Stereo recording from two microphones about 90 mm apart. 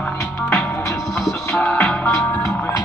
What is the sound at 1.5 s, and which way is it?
Music, 20° left (ahead or behind).